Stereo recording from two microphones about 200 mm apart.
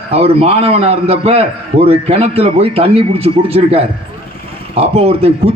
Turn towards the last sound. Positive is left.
turn(degrees=-30)  # may be behind; listen again after turning